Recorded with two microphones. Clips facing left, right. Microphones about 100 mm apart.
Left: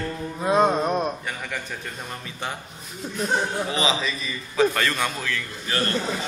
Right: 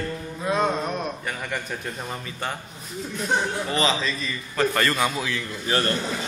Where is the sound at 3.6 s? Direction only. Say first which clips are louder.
Right 1 dB; 5° left (ahead or behind).